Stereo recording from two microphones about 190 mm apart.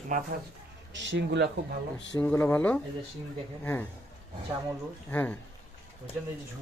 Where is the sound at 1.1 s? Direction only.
60° right (ahead or behind).